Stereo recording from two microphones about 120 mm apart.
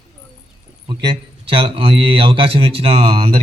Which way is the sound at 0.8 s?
45° right (ahead or behind).